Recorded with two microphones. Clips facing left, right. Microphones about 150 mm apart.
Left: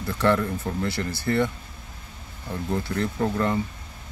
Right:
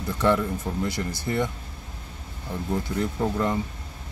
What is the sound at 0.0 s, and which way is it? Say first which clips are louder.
Speech: even; 15° right (ahead or behind).